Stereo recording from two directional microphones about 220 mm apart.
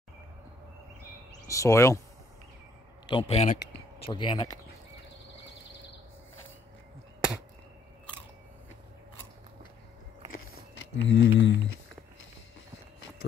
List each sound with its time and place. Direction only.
1.5 s speech: 15° left (ahead or behind)
3.1 s speech: 25° left (ahead or behind)
11.0 s speech: 55° left (ahead or behind)